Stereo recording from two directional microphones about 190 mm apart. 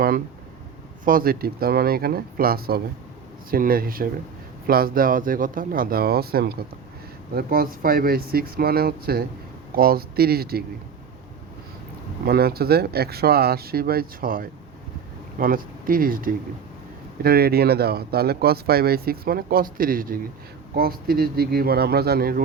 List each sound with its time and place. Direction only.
1.0 s speech: 50° right (ahead or behind)
12.2 s speech: 55° right (ahead or behind)